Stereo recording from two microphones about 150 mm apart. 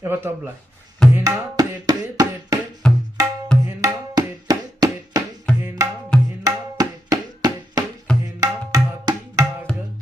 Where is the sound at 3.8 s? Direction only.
25° right (ahead or behind).